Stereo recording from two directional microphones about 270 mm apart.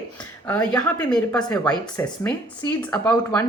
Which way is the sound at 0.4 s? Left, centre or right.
Centre.